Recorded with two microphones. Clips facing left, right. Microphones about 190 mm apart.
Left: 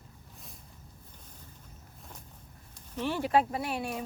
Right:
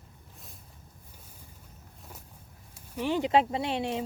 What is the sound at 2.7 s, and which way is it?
Speech, 15° right (ahead or behind).